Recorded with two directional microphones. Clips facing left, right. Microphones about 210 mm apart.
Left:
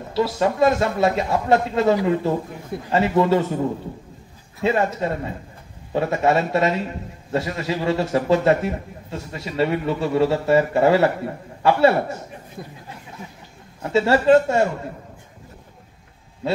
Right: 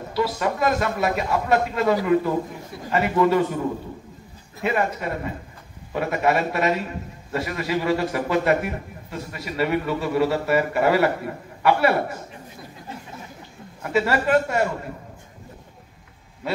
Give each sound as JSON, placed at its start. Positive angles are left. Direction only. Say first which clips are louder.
{"t": 0.1, "sound": "a man's voice", "louder": "left 3 dB", "side_deg": 25}
{"t": 4.6, "sound": "a man's voice", "louder": "left 3 dB", "side_deg": 25}
{"t": 13.8, "sound": "a man's voice", "louder": "left 5 dB", "side_deg": 25}